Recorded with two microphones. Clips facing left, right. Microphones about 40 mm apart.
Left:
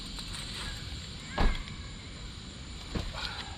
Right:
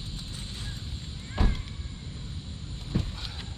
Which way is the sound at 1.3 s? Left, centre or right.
Centre.